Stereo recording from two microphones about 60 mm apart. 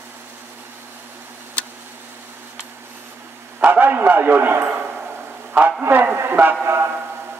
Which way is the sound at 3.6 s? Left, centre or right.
Right.